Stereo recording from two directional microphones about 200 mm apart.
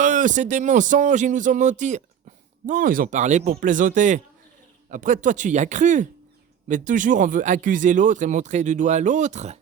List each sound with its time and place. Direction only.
0.0 s speech: 40° right (ahead or behind)